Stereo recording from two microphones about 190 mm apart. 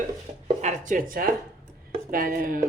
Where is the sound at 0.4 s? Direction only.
40° right (ahead or behind).